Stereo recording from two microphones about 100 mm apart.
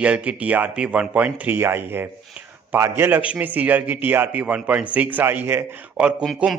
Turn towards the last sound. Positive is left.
turn(degrees=-10)  # may be behind; listen again after turning